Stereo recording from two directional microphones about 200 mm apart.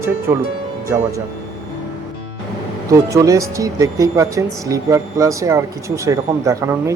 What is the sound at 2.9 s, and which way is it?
Speech, 15° right (ahead or behind).